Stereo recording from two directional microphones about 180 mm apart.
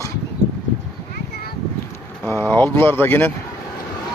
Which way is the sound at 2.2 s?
10° left (ahead or behind).